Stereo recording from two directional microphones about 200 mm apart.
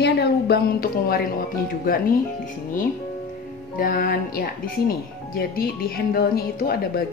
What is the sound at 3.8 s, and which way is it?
Speech, 45° left (ahead or behind).